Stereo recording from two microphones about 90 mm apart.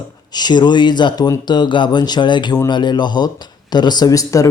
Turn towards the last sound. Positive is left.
turn(degrees=40)  # may be behind; listen again after turning